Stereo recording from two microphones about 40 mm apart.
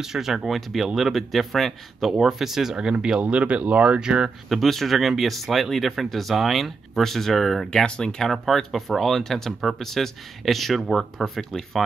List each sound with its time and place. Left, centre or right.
0.0 s speech: centre
3.2 s speech: right
4.0 s speech: centre
4.5 s speech: centre
7.7 s speech: centre
8.3 s speech: centre